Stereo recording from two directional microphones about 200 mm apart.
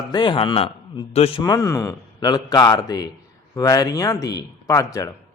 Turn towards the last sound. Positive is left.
turn(degrees=15)  # may be behind; listen again after turning